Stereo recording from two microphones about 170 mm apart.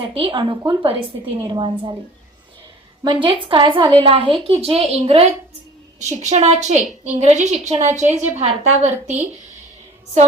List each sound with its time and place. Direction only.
0.0 s a woman's voice: 30° right (ahead or behind)
3.0 s a woman's voice: 25° right (ahead or behind)